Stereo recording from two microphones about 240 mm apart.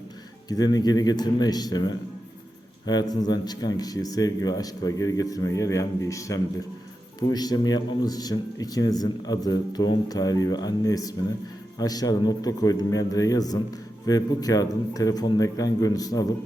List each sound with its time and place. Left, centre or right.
0.4 s speech: centre